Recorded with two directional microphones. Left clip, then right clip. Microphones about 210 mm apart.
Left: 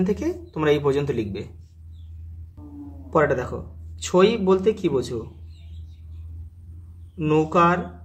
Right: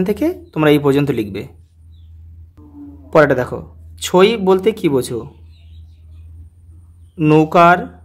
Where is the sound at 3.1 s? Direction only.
50° right (ahead or behind).